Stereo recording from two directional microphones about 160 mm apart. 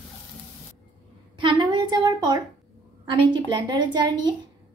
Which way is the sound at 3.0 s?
30° right (ahead or behind).